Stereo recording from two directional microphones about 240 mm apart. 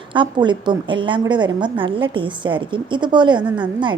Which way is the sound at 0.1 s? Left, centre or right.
Centre.